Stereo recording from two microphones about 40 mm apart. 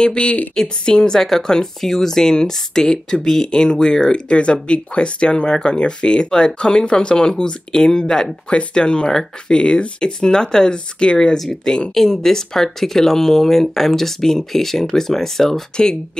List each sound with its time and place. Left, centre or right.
0.0 s speech: left; by 15.6 s centre
15.7 s speech: centre